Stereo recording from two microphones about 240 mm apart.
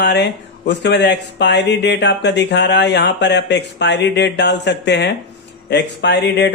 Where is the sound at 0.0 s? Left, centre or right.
Left.